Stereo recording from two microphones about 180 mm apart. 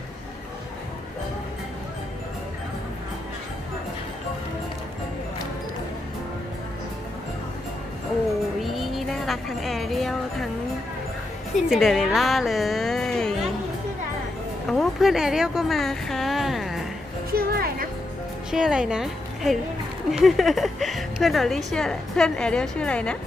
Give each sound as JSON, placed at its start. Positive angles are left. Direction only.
{"t": 8.6, "sound": "a sound", "side_deg": 0}
{"t": 11.7, "sound": "speech", "side_deg": 0}
{"t": 14.7, "sound": "speech", "side_deg": 0}
{"t": 17.3, "sound": "music", "side_deg": -55}
{"t": 18.5, "sound": "a woman's voice", "side_deg": -5}